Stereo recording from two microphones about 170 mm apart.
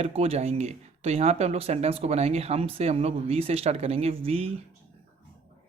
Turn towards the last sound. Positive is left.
turn(degrees=-35)  # may be behind; listen again after turning